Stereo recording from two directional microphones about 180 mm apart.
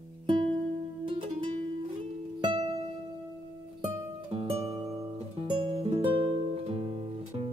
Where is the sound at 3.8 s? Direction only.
35° right (ahead or behind).